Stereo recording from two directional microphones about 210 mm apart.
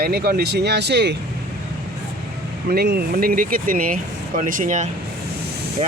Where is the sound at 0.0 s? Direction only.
45° right (ahead or behind).